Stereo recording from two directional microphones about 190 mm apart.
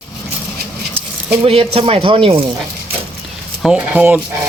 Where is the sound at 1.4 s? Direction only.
30° right (ahead or behind).